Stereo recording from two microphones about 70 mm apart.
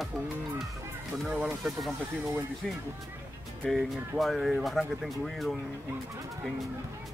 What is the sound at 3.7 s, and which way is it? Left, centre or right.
Speech, centre.